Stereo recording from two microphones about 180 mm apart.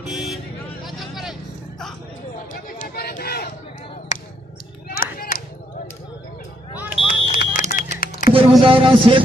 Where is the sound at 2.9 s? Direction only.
60° left (ahead or behind).